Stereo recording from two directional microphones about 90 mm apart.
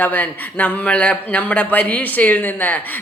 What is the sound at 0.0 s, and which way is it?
A man's voice, 20° left (ahead or behind).